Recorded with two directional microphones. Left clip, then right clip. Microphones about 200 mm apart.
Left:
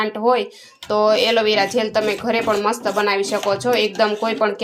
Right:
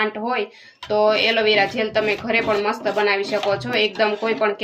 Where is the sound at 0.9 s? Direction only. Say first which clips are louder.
Left 1 dB; 25° left (ahead or behind).